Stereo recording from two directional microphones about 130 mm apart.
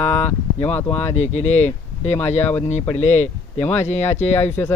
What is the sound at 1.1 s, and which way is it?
Speech, 60° left (ahead or behind).